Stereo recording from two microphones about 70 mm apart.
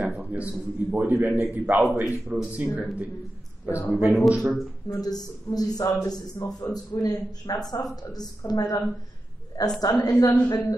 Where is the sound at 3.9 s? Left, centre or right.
Right.